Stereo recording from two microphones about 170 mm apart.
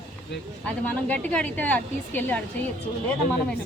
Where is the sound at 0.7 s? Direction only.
10° left (ahead or behind).